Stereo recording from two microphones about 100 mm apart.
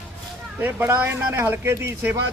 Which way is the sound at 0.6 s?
20° right (ahead or behind).